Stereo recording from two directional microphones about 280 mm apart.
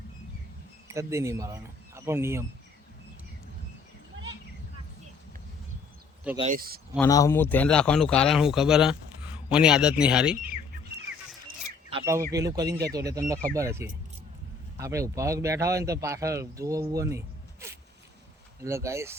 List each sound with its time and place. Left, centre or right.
0.9 s speech: centre
6.4 s speech: right
6.9 s speech: centre
11.9 s speech: centre